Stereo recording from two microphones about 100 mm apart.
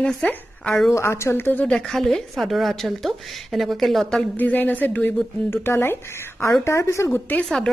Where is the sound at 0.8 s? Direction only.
30° left (ahead or behind).